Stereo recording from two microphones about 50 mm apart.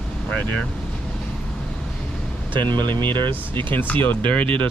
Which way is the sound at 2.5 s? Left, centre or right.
Left.